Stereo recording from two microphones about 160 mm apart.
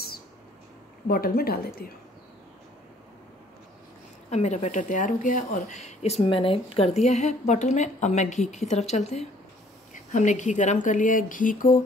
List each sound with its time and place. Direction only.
1.0 s speech: 70° left (ahead or behind)
4.3 s speech: 45° left (ahead or behind)